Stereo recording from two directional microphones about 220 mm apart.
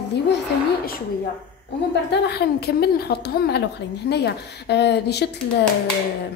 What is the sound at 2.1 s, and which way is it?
A woman's voice, 50° left (ahead or behind).